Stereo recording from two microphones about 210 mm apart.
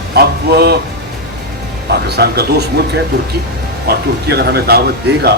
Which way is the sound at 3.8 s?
50° right (ahead or behind).